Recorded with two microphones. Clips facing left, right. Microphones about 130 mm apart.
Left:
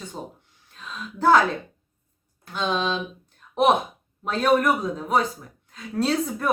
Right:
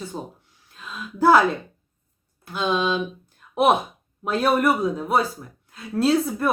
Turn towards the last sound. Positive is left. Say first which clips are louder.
# right 3 dB
turn(degrees=-5)  # may be behind; listen again after turning